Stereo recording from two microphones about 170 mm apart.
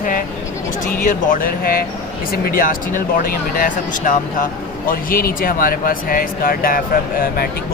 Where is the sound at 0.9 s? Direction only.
55° left (ahead or behind).